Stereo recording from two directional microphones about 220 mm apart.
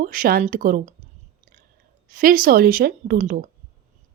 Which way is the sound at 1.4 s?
40° right (ahead or behind).